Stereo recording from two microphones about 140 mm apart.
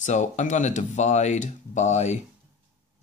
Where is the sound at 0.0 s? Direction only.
60° left (ahead or behind).